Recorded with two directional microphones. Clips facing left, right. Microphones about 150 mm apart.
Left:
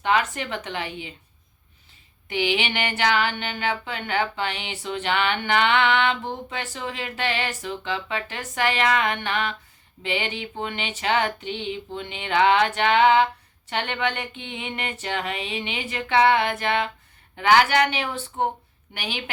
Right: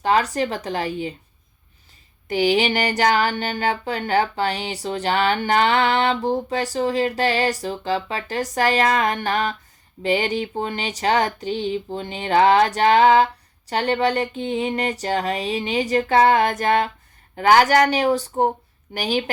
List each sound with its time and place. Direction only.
0.0 s speech: 35° right (ahead or behind)
2.2 s speech: 40° right (ahead or behind)